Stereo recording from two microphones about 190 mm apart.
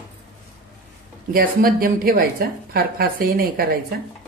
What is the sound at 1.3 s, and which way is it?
A woman's voice, 50° right (ahead or behind).